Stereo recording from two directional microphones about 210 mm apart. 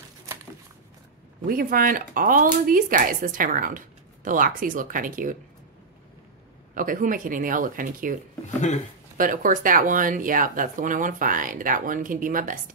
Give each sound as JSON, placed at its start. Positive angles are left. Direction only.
{"t": 1.5, "sound": "speech", "side_deg": -40}
{"t": 6.7, "sound": "speech", "side_deg": -40}
{"t": 8.5, "sound": "speech", "side_deg": 35}
{"t": 9.1, "sound": "speech", "side_deg": -40}